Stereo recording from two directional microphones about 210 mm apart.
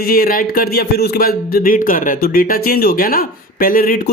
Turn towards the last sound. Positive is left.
turn(degrees=40)  # may be behind; listen again after turning